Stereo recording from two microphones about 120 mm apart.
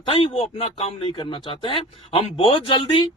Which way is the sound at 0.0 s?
50° left (ahead or behind).